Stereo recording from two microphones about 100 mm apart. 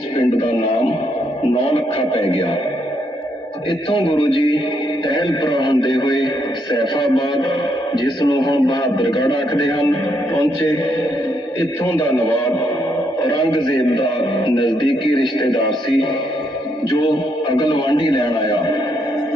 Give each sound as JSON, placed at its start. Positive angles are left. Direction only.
{"t": 1.7, "sound": "speech", "side_deg": 70}
{"t": 3.7, "sound": "a man's voice", "side_deg": 55}
{"t": 13.2, "sound": "a man's voice", "side_deg": 45}
{"t": 17.6, "sound": "a man's voice", "side_deg": 45}